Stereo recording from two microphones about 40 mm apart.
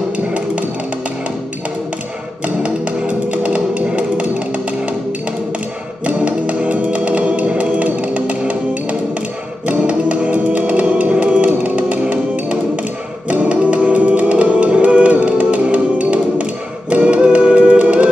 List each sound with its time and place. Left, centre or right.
2.4 s music: right
6.0 s music: right